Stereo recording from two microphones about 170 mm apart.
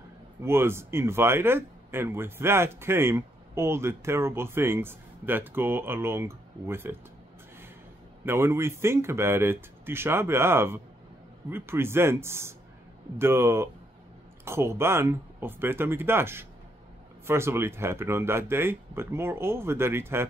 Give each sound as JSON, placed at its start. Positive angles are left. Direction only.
{"t": 0.4, "sound": "speech", "side_deg": -15}
{"t": 8.3, "sound": "speech", "side_deg": -15}